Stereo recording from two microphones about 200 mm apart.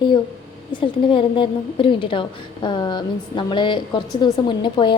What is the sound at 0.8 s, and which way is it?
A woman's voice, 25° left (ahead or behind).